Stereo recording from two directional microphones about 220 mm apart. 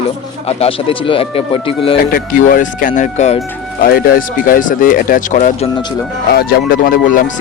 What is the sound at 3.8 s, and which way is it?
Speech, 45° left (ahead or behind).